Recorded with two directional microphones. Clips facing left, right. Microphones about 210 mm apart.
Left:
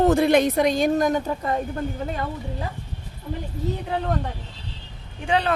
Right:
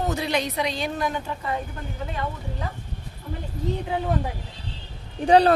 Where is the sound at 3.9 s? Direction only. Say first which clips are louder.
Even; 5° right (ahead or behind).